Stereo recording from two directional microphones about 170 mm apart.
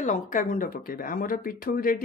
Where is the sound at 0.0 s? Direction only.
45° left (ahead or behind).